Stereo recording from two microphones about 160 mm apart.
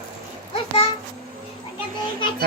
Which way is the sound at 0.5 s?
35° left (ahead or behind).